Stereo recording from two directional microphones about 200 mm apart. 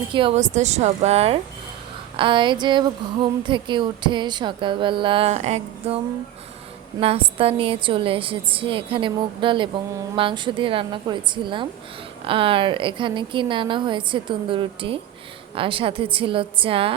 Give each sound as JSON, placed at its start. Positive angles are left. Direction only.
{"t": 0.1, "sound": "a woman's voice", "side_deg": -25}
{"t": 7.0, "sound": "a woman's voice", "side_deg": -30}